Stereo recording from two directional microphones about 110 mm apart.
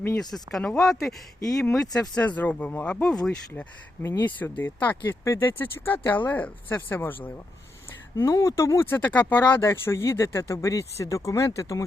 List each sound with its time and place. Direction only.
0.2 s speech: centre (ahead or behind)
2.0 s speech: 10° left (ahead or behind)
4.0 s speech: 20° left (ahead or behind)
8.1 s speech: 30° left (ahead or behind)